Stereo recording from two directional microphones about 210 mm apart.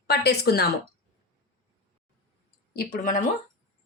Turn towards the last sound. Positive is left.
turn(degrees=40)  # may be behind; listen again after turning